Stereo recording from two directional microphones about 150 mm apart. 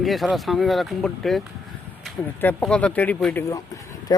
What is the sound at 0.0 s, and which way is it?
Speech, centre (ahead or behind).